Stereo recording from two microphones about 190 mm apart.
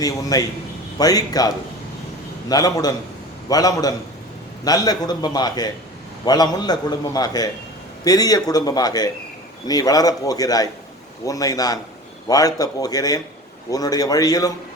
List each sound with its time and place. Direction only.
0.0 s a man's voice: 20° left (ahead or behind)